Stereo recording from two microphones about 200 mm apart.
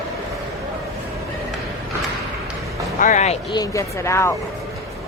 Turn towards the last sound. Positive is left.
turn(degrees=15)  # may be behind; listen again after turning